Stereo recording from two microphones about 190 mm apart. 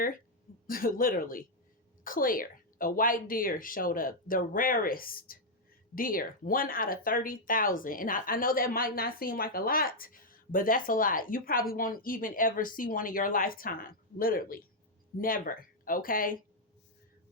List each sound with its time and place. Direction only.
0.7 s speech: 50° left (ahead or behind)